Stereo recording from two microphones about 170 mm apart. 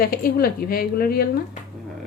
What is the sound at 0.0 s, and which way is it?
A woman's voice, 60° left (ahead or behind).